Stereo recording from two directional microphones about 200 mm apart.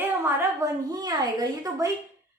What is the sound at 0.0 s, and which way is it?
A woman's voice, 15° right (ahead or behind).